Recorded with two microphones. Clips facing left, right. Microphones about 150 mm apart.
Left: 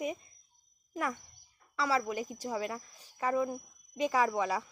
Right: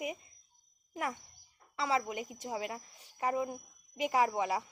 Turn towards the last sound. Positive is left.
turn(degrees=-25)  # may be behind; listen again after turning